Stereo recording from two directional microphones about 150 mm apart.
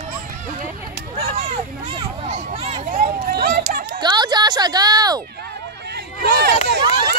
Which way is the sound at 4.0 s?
30° right (ahead or behind).